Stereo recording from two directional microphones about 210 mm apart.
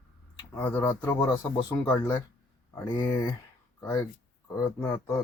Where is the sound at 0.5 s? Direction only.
10° left (ahead or behind).